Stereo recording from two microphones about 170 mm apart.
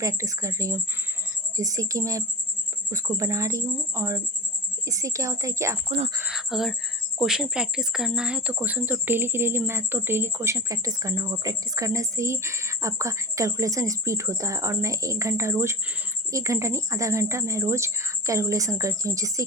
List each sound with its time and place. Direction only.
0.0 s speech: 20° right (ahead or behind)
6.1 s speech: 5° right (ahead or behind); by 19.5 s 20° right (ahead or behind)